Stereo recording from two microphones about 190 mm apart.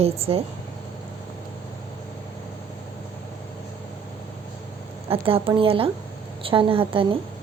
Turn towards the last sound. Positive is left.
turn(degrees=-30)  # may be behind; listen again after turning